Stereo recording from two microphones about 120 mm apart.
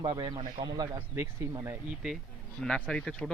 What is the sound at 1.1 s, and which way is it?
Speech, 20° right (ahead or behind).